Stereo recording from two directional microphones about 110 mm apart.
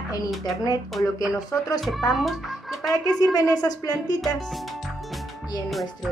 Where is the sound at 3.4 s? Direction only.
35° left (ahead or behind).